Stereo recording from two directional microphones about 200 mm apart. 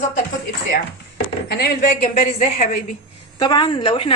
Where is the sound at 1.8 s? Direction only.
40° left (ahead or behind).